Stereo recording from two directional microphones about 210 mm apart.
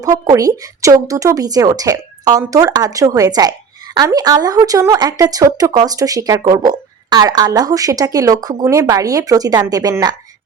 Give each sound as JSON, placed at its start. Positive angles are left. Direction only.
{"t": 0.0, "sound": "speech", "side_deg": -15}